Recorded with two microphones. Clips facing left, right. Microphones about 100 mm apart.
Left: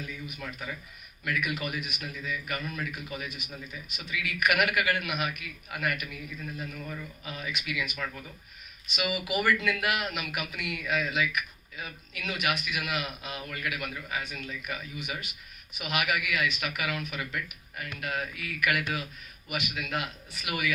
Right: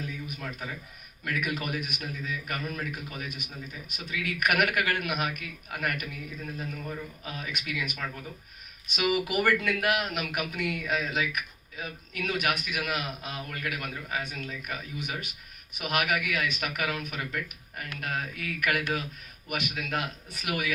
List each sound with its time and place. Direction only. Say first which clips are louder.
1.2 s a man's voice: even; 45° right (ahead or behind)
7.3 s a man's voice: left 1 dB; 50° right (ahead or behind)